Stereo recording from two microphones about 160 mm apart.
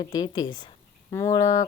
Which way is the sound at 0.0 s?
25° left (ahead or behind).